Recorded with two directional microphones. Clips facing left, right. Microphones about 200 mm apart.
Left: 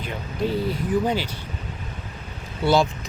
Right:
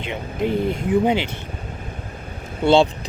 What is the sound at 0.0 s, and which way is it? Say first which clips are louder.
Speech: right 3 dB; 20° right (ahead or behind).